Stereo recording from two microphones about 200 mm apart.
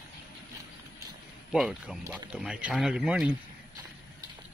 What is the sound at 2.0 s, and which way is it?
Speech, 15° right (ahead or behind).